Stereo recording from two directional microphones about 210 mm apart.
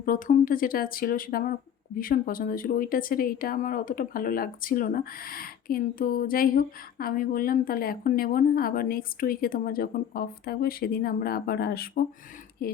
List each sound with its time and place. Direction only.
0.0 s a woman's voice: 40° left (ahead or behind)